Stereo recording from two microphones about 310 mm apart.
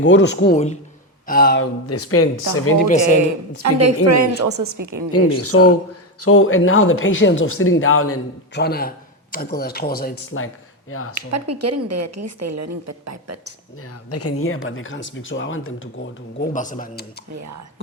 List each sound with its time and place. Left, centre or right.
0.0 s speech: left
0.5 s speech: left
1.9 s speech: left
3.2 s a woman's voice: right
4.4 s a woman's voice: right
4.8 s a woman's voice: right
5.4 s speech: left
8.6 s speech: left
10.3 s speech: left
11.1 s a woman's voice: right
14.1 s speech: left
16.4 s speech: left